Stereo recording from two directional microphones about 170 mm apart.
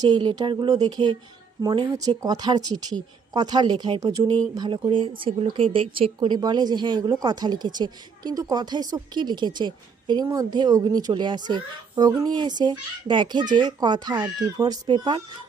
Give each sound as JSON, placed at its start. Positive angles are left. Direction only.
{"t": 0.1, "sound": "a woman's voice", "side_deg": -25}